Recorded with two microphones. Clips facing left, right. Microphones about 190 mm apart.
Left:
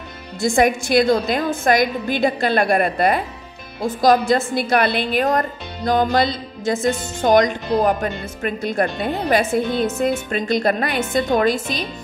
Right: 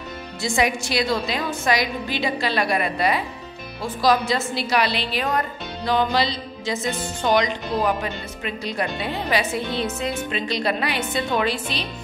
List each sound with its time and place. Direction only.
0.4 s a woman's voice: 50° left (ahead or behind)